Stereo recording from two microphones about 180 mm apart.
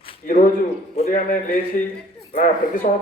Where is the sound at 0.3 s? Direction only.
50° left (ahead or behind).